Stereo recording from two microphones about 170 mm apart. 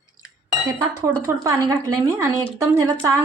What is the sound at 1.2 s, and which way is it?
A woman's voice, 20° right (ahead or behind).